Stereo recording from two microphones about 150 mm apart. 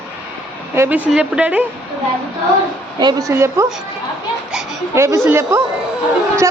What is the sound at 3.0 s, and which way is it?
Speech, 25° right (ahead or behind).